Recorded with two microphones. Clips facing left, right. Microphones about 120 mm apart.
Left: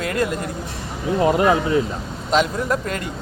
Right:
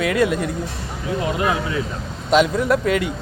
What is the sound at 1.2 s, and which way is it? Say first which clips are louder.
Speech: left 6 dB; 35° left (ahead or behind).